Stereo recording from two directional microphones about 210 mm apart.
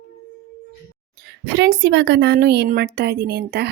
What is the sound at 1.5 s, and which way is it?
A woman's voice, 55° right (ahead or behind).